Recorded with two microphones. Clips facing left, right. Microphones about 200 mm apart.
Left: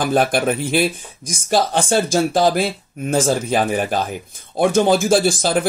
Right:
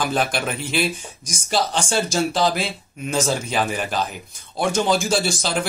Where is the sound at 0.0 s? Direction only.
50° left (ahead or behind).